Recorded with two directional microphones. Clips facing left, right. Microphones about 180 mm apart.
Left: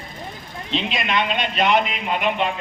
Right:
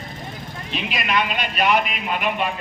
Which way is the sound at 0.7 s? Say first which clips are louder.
Left 2 dB; 25° left (ahead or behind).